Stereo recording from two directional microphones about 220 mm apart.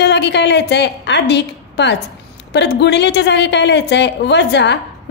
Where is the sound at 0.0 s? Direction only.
50° left (ahead or behind).